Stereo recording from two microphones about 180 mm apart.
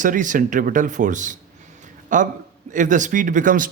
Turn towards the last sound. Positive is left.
turn(degrees=-45)  # may be behind; listen again after turning